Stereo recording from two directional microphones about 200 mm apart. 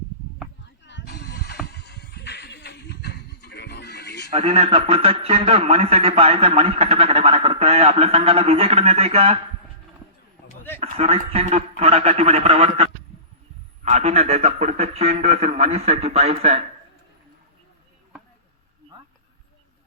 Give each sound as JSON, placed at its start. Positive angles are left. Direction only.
{"t": 0.9, "sound": "a sound", "side_deg": 55}
{"t": 1.6, "sound": "music", "side_deg": 55}
{"t": 4.3, "sound": "a man's voice", "side_deg": -30}
{"t": 10.8, "sound": "a man's voice", "side_deg": -30}